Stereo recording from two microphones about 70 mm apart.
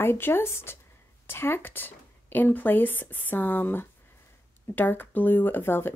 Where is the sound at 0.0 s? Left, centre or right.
Left.